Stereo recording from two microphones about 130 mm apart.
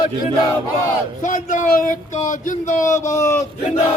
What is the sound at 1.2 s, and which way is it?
Speech, 75° left (ahead or behind).